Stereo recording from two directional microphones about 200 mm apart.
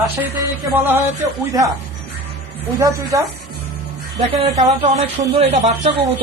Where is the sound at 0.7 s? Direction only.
10° right (ahead or behind).